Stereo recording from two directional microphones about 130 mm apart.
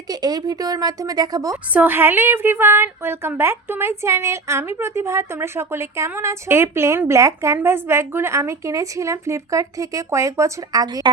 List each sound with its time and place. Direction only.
0.1 s a woman's voice: 30° right (ahead or behind)
1.7 s a woman's voice: 15° right (ahead or behind)